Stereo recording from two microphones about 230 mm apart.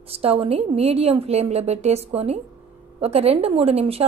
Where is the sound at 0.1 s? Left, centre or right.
Right.